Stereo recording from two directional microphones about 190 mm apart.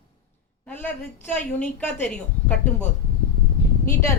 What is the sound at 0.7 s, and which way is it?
A woman's voice, 10° left (ahead or behind).